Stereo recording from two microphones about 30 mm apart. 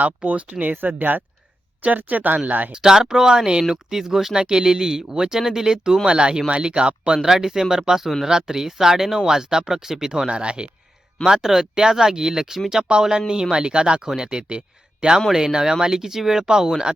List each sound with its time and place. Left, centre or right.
0.3 s speech: right
0.6 s speech: right
1.8 s speech: right
2.7 s speech: right
3.6 s speech: centre
6.1 s speech: right
7.2 s speech: centre
10.2 s speech: right
11.7 s speech: centre